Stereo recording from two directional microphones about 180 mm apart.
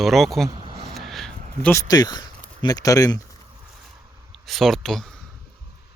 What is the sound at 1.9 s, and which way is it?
Speech, 20° left (ahead or behind).